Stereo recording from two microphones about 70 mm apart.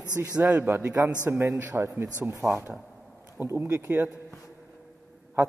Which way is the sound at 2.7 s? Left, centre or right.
Centre.